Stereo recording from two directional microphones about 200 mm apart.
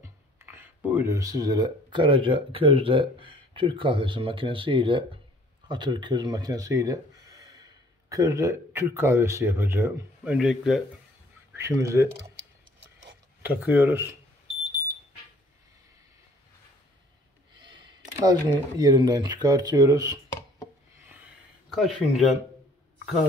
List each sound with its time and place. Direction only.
0.0 s speech: 10° right (ahead or behind)
11.5 s speech: 15° right (ahead or behind)
13.4 s speech: 10° right (ahead or behind)
17.6 s a sound: 25° right (ahead or behind)
18.8 s speech: 20° right (ahead or behind)
21.7 s speech: centre (ahead or behind)